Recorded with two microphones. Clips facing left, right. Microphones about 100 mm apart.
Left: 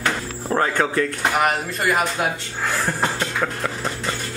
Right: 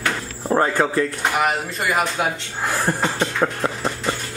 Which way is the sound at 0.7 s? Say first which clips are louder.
Right 1 dB; centre (ahead or behind).